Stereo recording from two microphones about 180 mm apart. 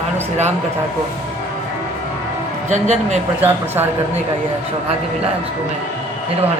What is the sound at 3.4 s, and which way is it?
Speech, 10° right (ahead or behind).